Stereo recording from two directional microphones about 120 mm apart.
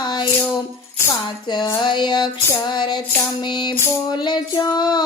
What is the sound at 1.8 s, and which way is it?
Female singing, 40° left (ahead or behind).